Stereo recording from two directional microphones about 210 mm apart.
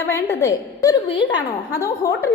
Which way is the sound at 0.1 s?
15° left (ahead or behind).